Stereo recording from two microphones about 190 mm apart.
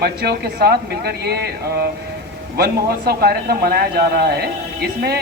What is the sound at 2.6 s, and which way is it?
A man's voice, 55° right (ahead or behind).